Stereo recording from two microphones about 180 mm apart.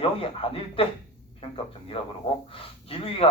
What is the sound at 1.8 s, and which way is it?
Speech, 30° left (ahead or behind).